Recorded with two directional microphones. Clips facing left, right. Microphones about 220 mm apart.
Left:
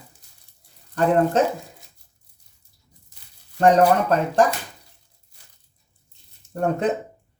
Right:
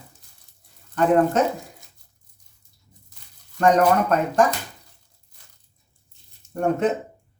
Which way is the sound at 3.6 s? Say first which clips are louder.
Left 1 dB; 30° left (ahead or behind).